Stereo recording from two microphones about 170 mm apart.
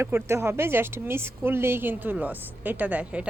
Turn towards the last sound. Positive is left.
turn(degrees=-10)  # may be behind; listen again after turning